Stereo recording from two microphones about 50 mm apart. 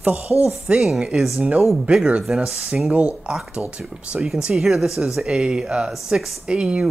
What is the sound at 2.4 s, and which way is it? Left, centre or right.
Speech, centre.